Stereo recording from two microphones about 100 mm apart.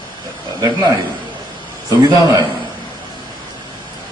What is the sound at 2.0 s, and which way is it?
Speech, 45° right (ahead or behind).